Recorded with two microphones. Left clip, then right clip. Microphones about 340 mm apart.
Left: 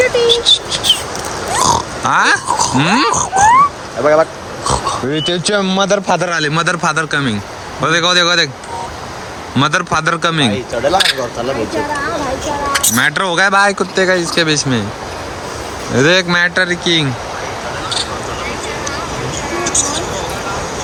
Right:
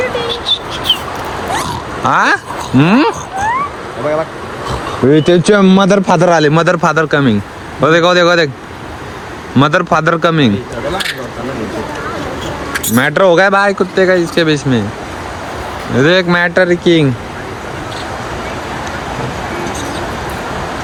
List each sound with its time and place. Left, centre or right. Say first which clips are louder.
0.3 s bird: left 5 dB; centre
2.0 s speech: right 1 dB; centre
3.1 s a sound: left 6 dB; left
4.0 s speech: left 5 dB; left
5.1 s speech: right 8 dB; centre
9.6 s speech: right 3 dB; centre
10.9 s speech: left 7 dB; left
12.9 s speech: right 9 dB; centre
16.0 s speech: right 1 dB; centre